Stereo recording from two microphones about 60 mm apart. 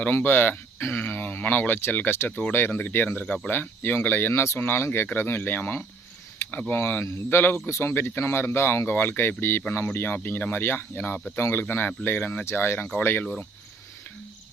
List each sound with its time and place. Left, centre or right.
0.1 s speech: left
3.2 s speech: left
3.5 s speech: left